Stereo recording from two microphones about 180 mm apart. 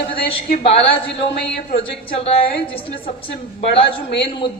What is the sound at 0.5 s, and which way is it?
A woman's voice, 30° left (ahead or behind).